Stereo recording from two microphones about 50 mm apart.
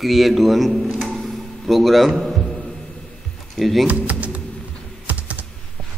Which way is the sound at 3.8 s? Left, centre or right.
Right.